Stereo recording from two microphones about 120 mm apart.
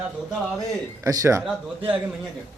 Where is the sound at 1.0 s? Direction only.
25° right (ahead or behind).